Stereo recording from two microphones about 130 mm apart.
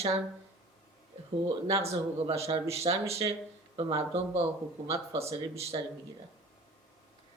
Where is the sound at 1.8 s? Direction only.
50° right (ahead or behind).